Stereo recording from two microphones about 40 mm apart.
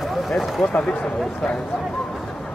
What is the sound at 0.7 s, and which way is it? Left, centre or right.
Speech, left.